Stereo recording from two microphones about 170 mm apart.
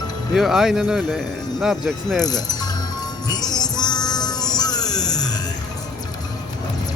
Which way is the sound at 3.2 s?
25° left (ahead or behind).